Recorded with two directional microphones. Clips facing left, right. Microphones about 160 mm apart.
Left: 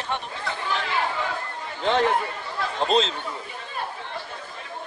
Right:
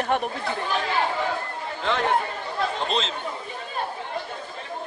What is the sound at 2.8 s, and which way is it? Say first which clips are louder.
Speech: left 5 dB; 35° left (ahead or behind).